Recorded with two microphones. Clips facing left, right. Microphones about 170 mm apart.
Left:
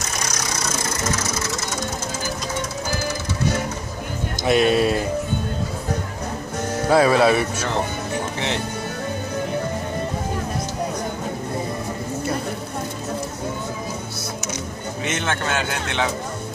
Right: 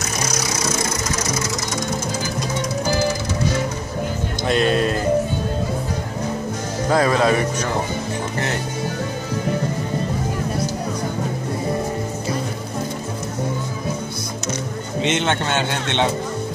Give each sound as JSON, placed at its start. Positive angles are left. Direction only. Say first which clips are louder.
{"t": 4.5, "sound": "music", "louder": "left 2 dB", "side_deg": 10}
{"t": 6.9, "sound": "speech", "louder": "left 2 dB", "side_deg": 10}
{"t": 15.0, "sound": "speech", "louder": "right 4 dB", "side_deg": -25}